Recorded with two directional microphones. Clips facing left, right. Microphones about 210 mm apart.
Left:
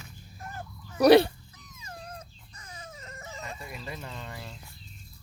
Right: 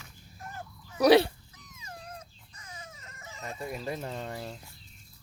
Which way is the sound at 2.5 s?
35° left (ahead or behind).